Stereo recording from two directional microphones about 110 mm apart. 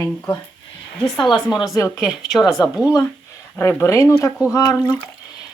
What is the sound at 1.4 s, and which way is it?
A woman's voice, centre (ahead or behind).